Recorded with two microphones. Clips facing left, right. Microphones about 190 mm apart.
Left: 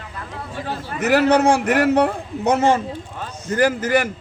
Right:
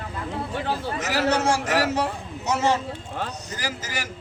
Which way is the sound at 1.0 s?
60° left (ahead or behind).